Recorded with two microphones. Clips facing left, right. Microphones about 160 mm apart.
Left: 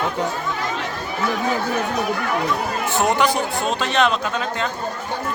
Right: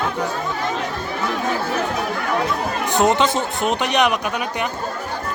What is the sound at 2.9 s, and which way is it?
Speech, 20° right (ahead or behind).